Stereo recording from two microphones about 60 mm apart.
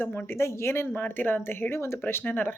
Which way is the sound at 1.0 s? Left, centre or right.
Left.